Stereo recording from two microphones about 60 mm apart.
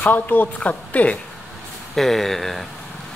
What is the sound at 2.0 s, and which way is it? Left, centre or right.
Speech, centre.